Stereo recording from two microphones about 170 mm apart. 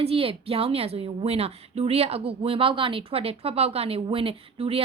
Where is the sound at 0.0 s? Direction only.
35° right (ahead or behind).